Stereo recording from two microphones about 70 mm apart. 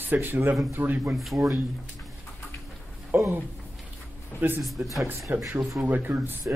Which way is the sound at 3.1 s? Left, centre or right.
Right.